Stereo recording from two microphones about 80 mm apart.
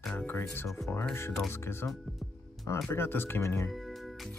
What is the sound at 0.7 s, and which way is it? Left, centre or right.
Speech, left.